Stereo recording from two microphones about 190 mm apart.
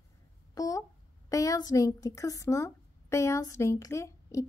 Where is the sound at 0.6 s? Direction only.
20° left (ahead or behind).